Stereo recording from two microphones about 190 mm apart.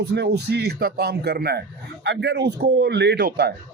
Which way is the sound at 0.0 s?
60° right (ahead or behind).